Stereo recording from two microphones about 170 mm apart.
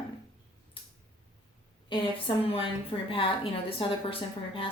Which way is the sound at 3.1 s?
30° left (ahead or behind).